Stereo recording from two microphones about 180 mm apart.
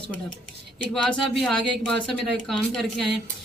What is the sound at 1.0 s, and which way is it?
A man's voice, 5° left (ahead or behind).